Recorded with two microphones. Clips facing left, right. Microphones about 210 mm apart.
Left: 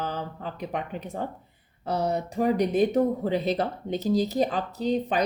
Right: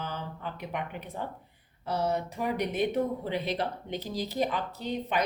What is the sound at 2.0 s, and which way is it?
Speech, 35° left (ahead or behind).